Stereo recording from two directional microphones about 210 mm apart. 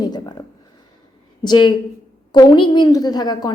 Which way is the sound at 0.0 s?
20° left (ahead or behind).